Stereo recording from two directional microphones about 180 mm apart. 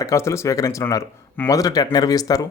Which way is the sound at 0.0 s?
15° left (ahead or behind).